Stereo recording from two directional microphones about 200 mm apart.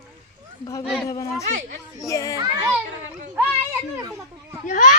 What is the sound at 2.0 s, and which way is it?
Speech, 15° left (ahead or behind).